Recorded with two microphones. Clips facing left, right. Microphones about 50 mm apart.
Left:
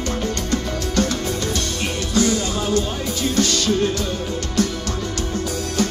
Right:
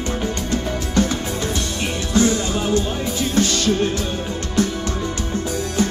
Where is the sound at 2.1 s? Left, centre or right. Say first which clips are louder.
Right 2 dB; right.